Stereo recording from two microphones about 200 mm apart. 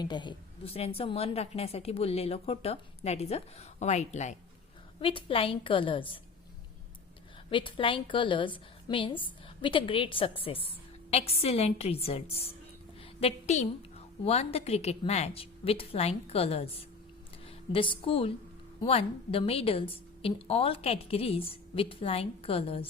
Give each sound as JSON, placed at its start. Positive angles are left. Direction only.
{"t": 0.0, "sound": "a woman's voice", "side_deg": 20}
{"t": 7.5, "sound": "a woman's voice", "side_deg": 25}